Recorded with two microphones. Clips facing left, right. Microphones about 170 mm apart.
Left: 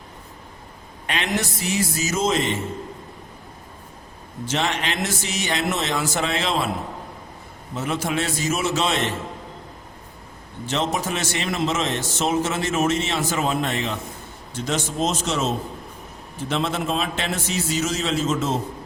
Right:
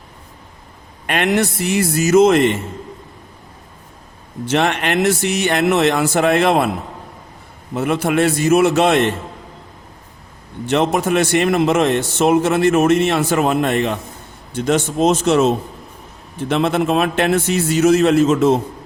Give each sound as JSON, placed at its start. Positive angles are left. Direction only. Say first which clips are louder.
{"t": 1.0, "sound": "a man's voice", "louder": "right 8 dB", "side_deg": -55}
{"t": 4.4, "sound": "a man's voice", "louder": "right 7 dB", "side_deg": -60}
{"t": 7.7, "sound": "a man's voice", "louder": "right 7 dB", "side_deg": -60}
{"t": 10.7, "sound": "a man's voice", "louder": "right 8 dB", "side_deg": -60}